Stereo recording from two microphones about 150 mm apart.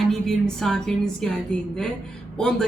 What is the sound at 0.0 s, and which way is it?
Speech, centre (ahead or behind).